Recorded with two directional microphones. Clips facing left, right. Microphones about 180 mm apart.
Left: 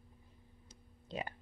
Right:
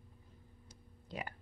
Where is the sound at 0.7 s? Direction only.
25° left (ahead or behind).